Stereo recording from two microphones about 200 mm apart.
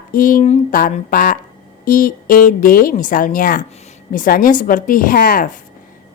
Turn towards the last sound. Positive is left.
turn(degrees=45)  # may be behind; listen again after turning